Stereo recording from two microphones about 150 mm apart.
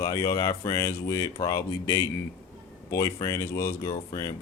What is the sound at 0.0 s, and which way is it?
A man's voice, 20° left (ahead or behind).